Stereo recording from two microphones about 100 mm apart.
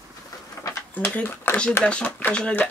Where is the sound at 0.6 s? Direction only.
30° left (ahead or behind).